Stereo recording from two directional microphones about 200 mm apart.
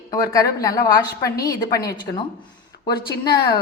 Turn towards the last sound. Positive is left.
turn(degrees=20)  # may be behind; listen again after turning